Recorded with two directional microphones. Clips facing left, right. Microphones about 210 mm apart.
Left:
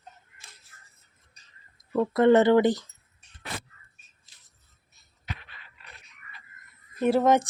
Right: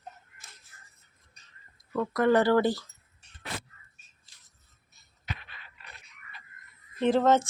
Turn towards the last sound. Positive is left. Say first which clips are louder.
# left 1 dB
turn(degrees=10)  # may be behind; listen again after turning